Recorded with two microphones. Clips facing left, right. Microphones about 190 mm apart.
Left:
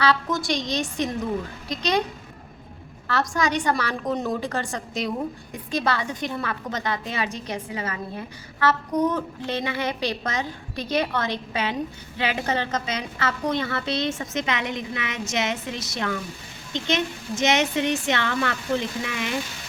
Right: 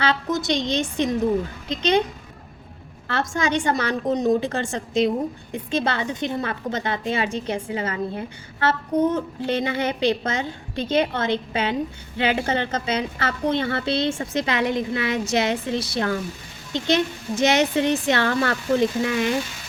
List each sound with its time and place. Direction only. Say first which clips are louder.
0.3 s a woman's voice: right 3 dB; 20° right (ahead or behind)
3.1 s a woman's voice: right 1 dB; 25° right (ahead or behind)